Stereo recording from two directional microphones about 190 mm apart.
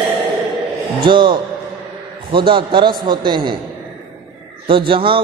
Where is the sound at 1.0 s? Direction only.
25° right (ahead or behind).